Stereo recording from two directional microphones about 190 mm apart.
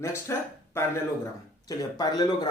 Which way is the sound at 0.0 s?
15° left (ahead or behind).